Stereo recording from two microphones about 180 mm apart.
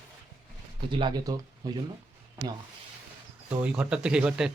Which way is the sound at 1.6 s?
20° right (ahead or behind).